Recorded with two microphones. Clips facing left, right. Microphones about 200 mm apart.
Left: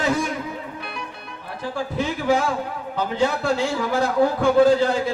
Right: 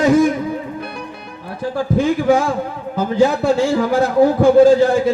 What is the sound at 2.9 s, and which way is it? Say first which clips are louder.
A man's voice: right 7 dB; 45° right (ahead or behind).